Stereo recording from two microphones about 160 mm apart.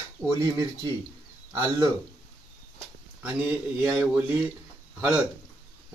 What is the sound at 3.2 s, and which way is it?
Speech, 10° right (ahead or behind).